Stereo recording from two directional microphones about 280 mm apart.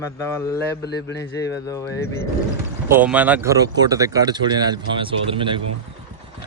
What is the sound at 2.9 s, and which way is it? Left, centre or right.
Speech, centre.